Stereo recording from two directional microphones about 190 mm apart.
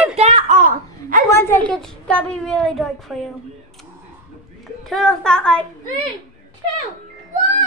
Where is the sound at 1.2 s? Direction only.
10° left (ahead or behind).